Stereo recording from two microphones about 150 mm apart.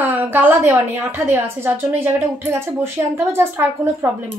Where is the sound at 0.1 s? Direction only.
15° right (ahead or behind).